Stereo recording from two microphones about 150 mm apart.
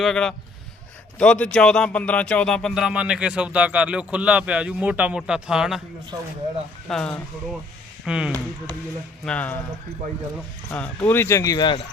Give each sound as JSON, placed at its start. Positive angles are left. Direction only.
{"t": 0.0, "sound": "speech", "side_deg": 5}
{"t": 6.8, "sound": "speech", "side_deg": 5}
{"t": 8.0, "sound": "speech", "side_deg": -5}
{"t": 9.2, "sound": "speech", "side_deg": 10}
{"t": 10.7, "sound": "speech", "side_deg": 10}